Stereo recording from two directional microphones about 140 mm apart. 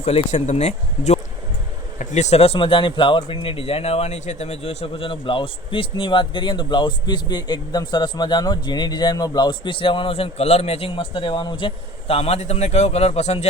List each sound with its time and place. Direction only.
0.0 s speech: 45° left (ahead or behind)